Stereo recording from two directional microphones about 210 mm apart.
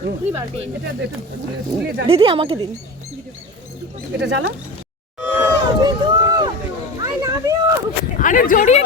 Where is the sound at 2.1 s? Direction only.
25° right (ahead or behind).